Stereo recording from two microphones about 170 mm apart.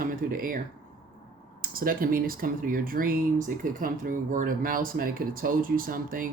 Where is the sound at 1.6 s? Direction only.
60° right (ahead or behind).